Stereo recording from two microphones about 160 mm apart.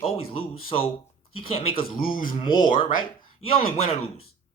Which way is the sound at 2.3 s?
30° left (ahead or behind).